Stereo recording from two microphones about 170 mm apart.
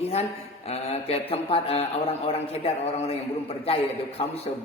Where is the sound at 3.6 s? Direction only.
35° left (ahead or behind).